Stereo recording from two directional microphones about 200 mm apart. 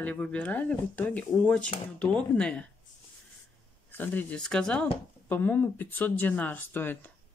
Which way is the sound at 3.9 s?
10° left (ahead or behind).